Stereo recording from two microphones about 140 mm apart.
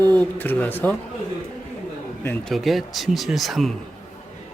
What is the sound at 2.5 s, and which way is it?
Speech, centre (ahead or behind).